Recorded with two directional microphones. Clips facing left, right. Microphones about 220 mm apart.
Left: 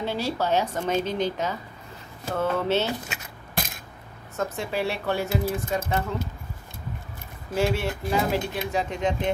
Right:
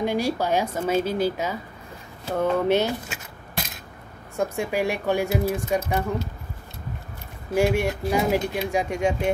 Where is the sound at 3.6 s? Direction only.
50° left (ahead or behind).